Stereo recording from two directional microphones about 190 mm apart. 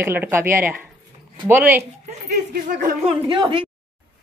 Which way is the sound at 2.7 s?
40° right (ahead or behind).